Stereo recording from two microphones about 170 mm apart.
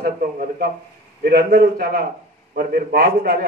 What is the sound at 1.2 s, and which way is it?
A man's voice, 60° right (ahead or behind).